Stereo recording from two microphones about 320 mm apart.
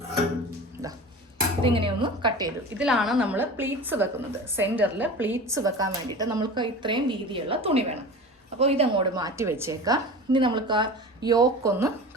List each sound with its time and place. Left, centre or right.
1.6 s a woman's voice: centre
2.7 s a woman's voice: centre